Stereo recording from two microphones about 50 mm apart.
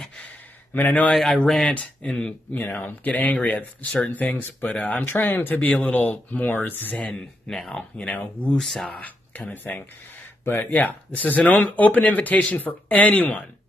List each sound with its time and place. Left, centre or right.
1.1 s speech: centre
1.7 s speech: left
2.5 s speech: left
4.6 s speech: left
5.0 s speech: left
7.5 s speech: centre
9.0 s speech: left
10.4 s speech: left
10.7 s speech: left